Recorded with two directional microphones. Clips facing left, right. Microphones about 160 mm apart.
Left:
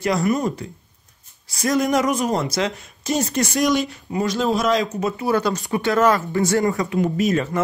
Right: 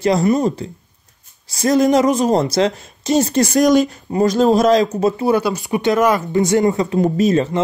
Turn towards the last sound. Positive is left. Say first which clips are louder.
# right 5 dB
turn(degrees=-30)  # may be behind; listen again after turning